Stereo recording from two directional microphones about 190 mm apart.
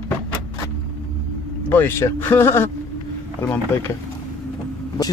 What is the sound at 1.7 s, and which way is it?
Speech, 10° left (ahead or behind).